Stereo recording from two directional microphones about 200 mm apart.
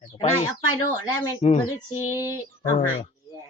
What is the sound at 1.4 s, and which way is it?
Speech, 35° left (ahead or behind).